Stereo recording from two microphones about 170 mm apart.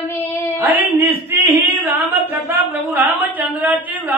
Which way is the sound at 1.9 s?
10° right (ahead or behind).